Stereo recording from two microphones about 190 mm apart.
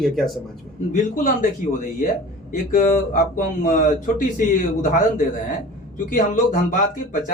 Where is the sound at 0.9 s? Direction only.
45° left (ahead or behind).